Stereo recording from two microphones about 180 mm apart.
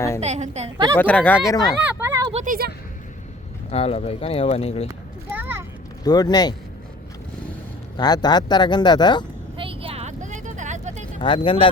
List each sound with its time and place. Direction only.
0.2 s a woman's voice: 40° right (ahead or behind)
0.9 s speech: 10° left (ahead or behind)
1.5 s speech: 20° left (ahead or behind)
1.8 s a sound: 10° right (ahead or behind)
2.3 s speech: 45° right (ahead or behind)
3.7 s speech: 35° left (ahead or behind)
4.9 s a sound: 10° right (ahead or behind)
6.1 s speech: 20° left (ahead or behind)
7.9 s speech: 25° left (ahead or behind)
9.6 s vehicle: 30° right (ahead or behind)
11.2 s speech: 30° left (ahead or behind)